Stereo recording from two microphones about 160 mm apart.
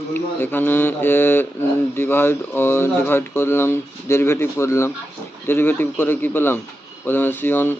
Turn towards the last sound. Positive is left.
turn(degrees=15)  # may be behind; listen again after turning